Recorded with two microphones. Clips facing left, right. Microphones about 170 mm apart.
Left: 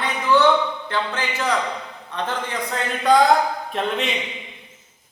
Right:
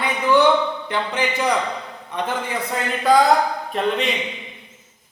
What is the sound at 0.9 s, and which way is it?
A man's voice, 15° right (ahead or behind).